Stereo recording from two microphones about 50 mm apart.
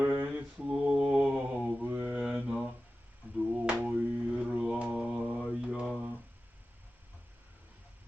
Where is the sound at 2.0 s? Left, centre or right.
Right.